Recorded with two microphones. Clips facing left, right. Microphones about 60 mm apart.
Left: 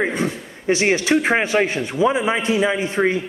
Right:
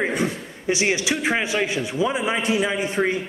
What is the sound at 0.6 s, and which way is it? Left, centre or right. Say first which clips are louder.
A man's voice: left 4 dB; left.